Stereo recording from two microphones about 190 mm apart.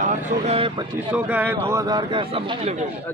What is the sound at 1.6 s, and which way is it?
Speech, 20° right (ahead or behind).